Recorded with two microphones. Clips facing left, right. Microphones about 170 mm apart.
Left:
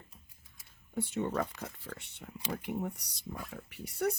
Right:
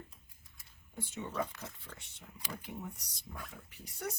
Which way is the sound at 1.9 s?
65° left (ahead or behind).